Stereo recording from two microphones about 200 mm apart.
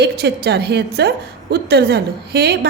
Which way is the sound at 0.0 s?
55° right (ahead or behind).